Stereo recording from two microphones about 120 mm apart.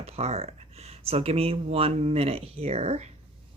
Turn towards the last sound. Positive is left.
turn(degrees=-65)  # may be behind; listen again after turning